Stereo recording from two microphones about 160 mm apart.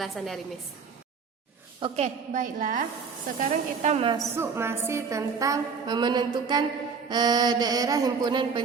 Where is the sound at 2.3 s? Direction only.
55° right (ahead or behind).